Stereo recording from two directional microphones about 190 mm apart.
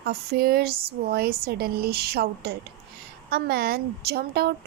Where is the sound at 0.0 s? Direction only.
55° right (ahead or behind).